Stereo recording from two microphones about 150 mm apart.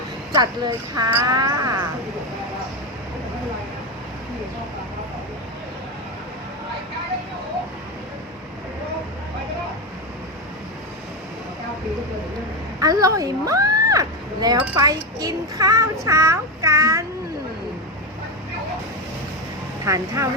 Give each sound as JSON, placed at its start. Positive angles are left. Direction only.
{"t": 0.3, "sound": "child singing", "side_deg": -25}
{"t": 12.8, "sound": "a sound", "side_deg": -25}
{"t": 15.2, "sound": "child singing", "side_deg": -25}
{"t": 19.8, "sound": "speech", "side_deg": -20}